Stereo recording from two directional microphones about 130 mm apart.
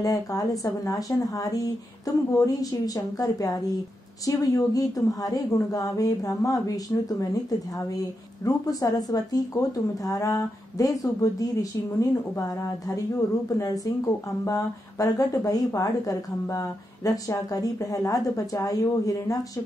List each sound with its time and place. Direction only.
0.0 s speech: 25° left (ahead or behind)
8.5 s speech: 30° left (ahead or behind)
13.6 s speech: 25° left (ahead or behind)